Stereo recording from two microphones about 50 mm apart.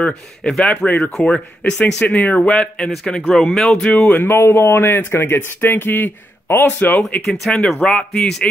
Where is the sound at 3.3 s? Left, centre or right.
Centre.